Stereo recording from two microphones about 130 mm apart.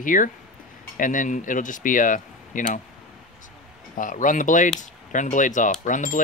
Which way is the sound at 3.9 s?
90° left.